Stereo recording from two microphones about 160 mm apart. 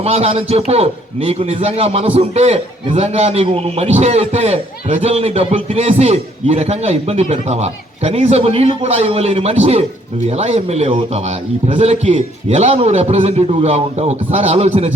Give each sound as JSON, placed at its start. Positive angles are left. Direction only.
{"t": 0.0, "sound": "a man's voice", "side_deg": -40}